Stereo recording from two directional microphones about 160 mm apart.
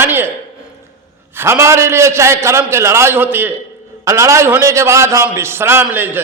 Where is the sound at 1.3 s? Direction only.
15° right (ahead or behind).